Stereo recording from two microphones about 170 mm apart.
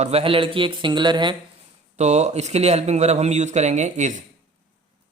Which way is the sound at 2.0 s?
40° right (ahead or behind).